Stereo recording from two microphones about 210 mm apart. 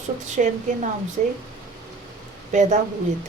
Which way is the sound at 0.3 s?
35° right (ahead or behind).